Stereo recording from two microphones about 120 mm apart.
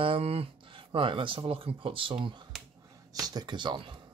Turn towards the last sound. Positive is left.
turn(degrees=-40)  # may be behind; listen again after turning